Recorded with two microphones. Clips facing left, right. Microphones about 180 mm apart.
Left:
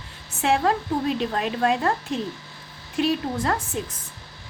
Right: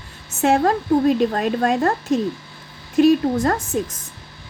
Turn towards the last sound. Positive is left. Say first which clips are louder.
# right 5 dB
turn(degrees=-45)  # may be behind; listen again after turning